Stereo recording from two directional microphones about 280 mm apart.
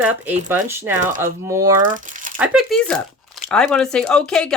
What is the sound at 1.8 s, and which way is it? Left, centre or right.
Speech, right.